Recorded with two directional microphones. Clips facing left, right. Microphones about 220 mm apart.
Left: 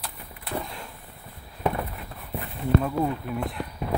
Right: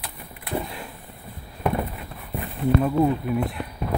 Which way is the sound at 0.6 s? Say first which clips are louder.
Right 3 dB; 5° right (ahead or behind).